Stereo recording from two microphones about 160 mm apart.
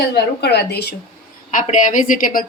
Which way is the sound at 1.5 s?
55° left (ahead or behind).